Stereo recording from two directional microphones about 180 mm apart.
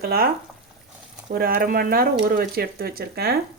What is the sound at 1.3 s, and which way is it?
Speech, 55° right (ahead or behind).